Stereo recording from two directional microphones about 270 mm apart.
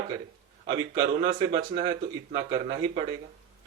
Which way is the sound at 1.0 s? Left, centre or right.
Right.